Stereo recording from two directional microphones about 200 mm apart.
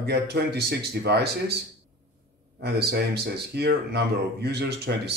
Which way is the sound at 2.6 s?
55° right (ahead or behind).